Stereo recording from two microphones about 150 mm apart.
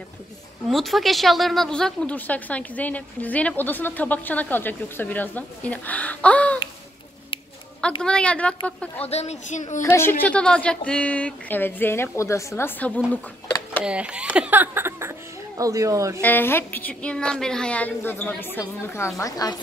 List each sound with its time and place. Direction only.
0.7 s a woman's voice: centre (ahead or behind)
8.0 s a woman's voice: 5° left (ahead or behind)
9.0 s a woman's voice: 45° left (ahead or behind)
9.8 s a woman's voice: 15° left (ahead or behind)
13.8 s speech: 5° right (ahead or behind)
16.2 s a woman's voice: 10° left (ahead or behind)